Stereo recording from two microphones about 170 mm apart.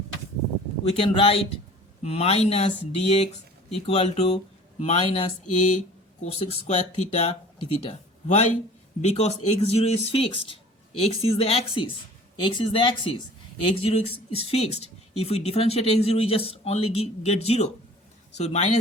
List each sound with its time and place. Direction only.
0.9 s speech: 30° left (ahead or behind)